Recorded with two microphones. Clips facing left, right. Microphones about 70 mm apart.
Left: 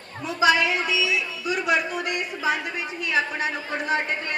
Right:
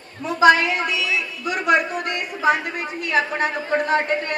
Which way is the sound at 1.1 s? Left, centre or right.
Right.